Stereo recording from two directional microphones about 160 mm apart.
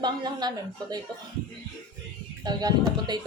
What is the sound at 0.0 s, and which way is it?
Speech, 25° right (ahead or behind).